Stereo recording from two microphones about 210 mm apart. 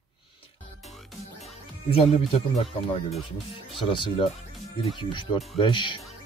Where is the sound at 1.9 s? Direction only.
30° left (ahead or behind).